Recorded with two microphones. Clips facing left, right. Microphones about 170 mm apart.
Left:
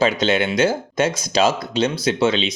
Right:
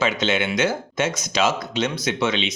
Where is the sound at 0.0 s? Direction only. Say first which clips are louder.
Left 4 dB; 35° left (ahead or behind).